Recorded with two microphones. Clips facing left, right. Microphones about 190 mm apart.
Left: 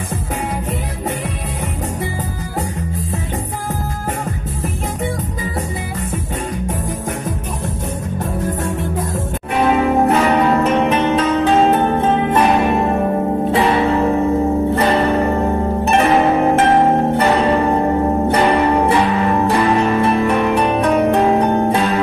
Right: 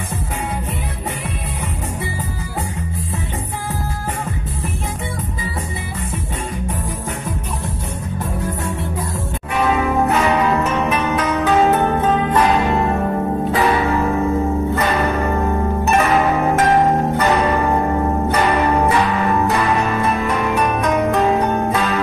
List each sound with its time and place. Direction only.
9.7 s music: 35° left (ahead or behind)